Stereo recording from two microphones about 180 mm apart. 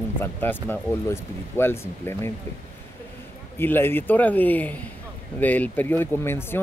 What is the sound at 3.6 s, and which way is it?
Speech, 10° left (ahead or behind).